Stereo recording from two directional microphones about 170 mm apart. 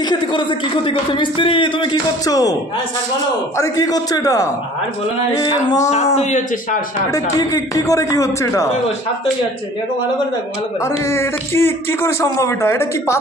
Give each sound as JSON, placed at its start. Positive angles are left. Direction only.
{"t": 0.1, "sound": "speech", "side_deg": 30}
{"t": 3.5, "sound": "speech", "side_deg": 20}
{"t": 6.1, "sound": "speech", "side_deg": 45}
{"t": 7.1, "sound": "speech", "side_deg": 20}
{"t": 10.8, "sound": "a man's voice", "side_deg": 15}